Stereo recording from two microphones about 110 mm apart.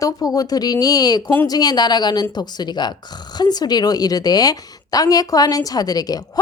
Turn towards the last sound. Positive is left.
turn(degrees=35)  # may be behind; listen again after turning